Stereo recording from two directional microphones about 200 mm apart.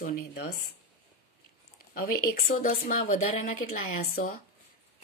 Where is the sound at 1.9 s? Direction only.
45° left (ahead or behind).